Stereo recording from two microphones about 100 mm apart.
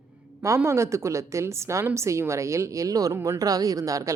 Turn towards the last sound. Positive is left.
turn(degrees=-35)  # may be behind; listen again after turning